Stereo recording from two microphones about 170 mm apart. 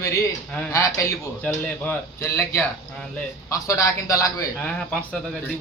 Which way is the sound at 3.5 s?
20° left (ahead or behind).